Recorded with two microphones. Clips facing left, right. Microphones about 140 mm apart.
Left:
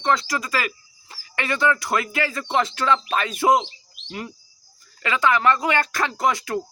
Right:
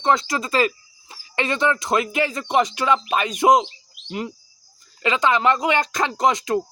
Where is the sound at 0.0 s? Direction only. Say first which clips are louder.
Right 2 dB; 20° right (ahead or behind).